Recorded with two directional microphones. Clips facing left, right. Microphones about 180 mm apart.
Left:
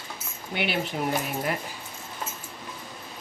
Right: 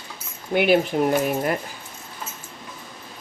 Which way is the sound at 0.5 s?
50° right (ahead or behind).